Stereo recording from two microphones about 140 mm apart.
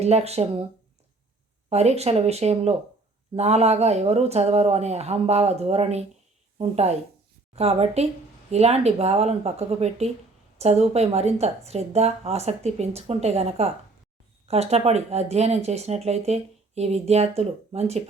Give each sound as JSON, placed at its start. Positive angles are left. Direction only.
{"t": 0.0, "sound": "speech", "side_deg": -50}
{"t": 1.7, "sound": "speech", "side_deg": -50}